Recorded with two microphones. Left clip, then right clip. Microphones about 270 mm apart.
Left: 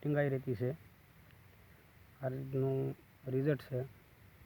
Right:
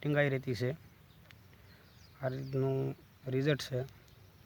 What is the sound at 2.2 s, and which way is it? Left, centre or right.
Speech, centre.